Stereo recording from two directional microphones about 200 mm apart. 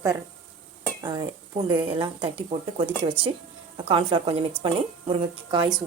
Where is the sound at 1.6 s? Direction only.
25° right (ahead or behind).